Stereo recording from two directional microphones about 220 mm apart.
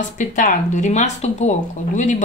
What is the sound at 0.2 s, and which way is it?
A woman's voice, 35° left (ahead or behind).